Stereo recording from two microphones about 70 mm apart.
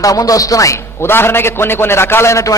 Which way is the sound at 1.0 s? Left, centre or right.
Left.